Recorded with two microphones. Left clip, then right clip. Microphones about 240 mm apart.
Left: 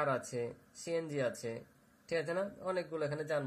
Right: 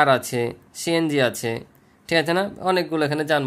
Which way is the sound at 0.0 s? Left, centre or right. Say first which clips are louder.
Right 17 dB; right.